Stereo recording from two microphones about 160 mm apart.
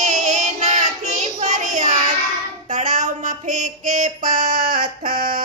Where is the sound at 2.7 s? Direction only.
50° right (ahead or behind).